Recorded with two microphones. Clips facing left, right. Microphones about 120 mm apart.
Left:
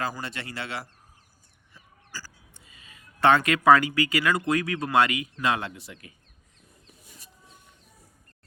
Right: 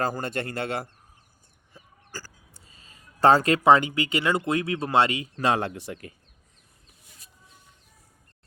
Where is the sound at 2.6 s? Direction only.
35° right (ahead or behind).